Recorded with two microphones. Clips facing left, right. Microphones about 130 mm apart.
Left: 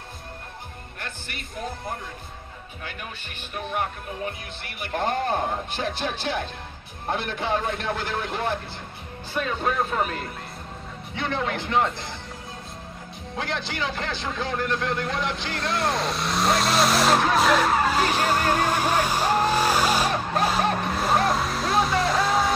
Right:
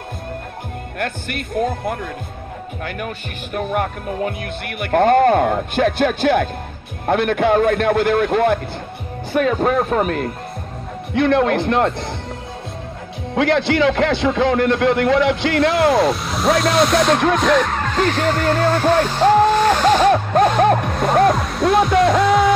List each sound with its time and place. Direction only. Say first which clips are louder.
0.9 s speech: right 14 dB; 65° right (ahead or behind)
3.5 s speech: right 8 dB; 60° right (ahead or behind)
9.3 s speech: right 10 dB; 55° right (ahead or behind)
11.1 s speech: right 12 dB; 65° right (ahead or behind)
13.3 s speech: right 14 dB; 75° right (ahead or behind)
16.1 s speech: right 6 dB; centre (ahead or behind)
17.3 s vehicle: right 4 dB; 5° left (ahead or behind)
20.3 s music: right 6 dB; 60° right (ahead or behind)
21.4 s speech: right 5 dB; centre (ahead or behind)